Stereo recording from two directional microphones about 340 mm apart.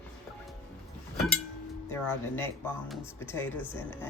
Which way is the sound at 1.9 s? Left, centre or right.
Centre.